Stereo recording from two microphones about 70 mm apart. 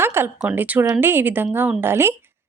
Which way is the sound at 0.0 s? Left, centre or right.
Right.